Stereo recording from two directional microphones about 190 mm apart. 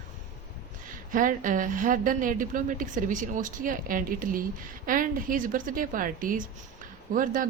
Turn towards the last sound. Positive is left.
turn(degrees=-45)  # may be behind; listen again after turning